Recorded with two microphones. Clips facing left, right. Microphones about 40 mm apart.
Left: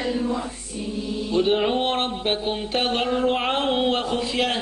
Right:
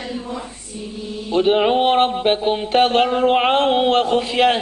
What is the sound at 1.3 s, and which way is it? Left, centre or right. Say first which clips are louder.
Music: right 6 dB; right.